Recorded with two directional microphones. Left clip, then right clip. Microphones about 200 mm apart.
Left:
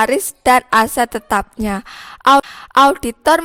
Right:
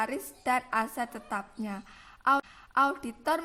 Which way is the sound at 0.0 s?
50° left (ahead or behind).